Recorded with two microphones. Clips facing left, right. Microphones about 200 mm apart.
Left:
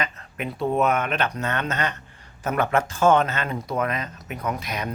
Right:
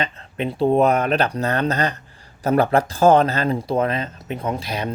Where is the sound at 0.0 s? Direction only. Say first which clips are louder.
Right 5 dB; 30° right (ahead or behind).